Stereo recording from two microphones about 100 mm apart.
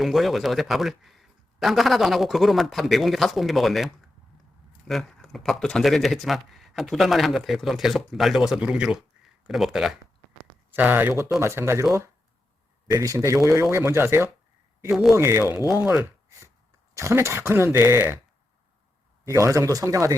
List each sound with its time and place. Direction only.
0.0 s a man's voice: centre (ahead or behind)
10.8 s speech: 20° right (ahead or behind)
12.9 s speech: 30° right (ahead or behind)
14.8 s a man's voice: 5° right (ahead or behind)
15.1 s speech: 25° right (ahead or behind)
15.8 s speech: 10° right (ahead or behind)
16.9 s speech: 30° right (ahead or behind)
19.2 s speech: 30° right (ahead or behind)